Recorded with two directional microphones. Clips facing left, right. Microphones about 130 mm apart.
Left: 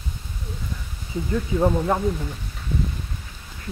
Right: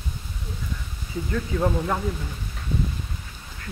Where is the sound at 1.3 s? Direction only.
15° left (ahead or behind).